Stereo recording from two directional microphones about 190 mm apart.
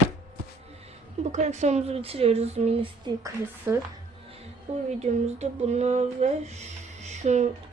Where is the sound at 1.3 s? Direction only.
40° right (ahead or behind).